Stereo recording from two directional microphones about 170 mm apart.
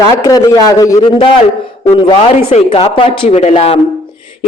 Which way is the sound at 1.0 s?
30° left (ahead or behind).